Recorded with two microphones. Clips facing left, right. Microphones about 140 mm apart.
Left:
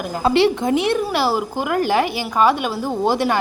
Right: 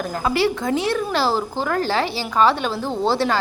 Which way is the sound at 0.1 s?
25° left (ahead or behind).